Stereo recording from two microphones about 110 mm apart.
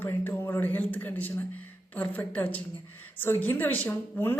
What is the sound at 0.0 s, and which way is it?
A woman's voice, 20° left (ahead or behind).